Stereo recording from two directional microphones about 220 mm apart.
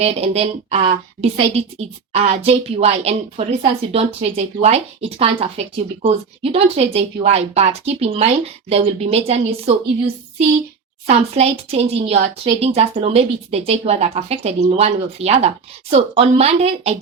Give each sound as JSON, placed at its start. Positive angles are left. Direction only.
{"t": 0.0, "sound": "a woman's voice", "side_deg": -30}
{"t": 2.1, "sound": "a woman's voice", "side_deg": -30}
{"t": 11.1, "sound": "a woman's voice", "side_deg": -30}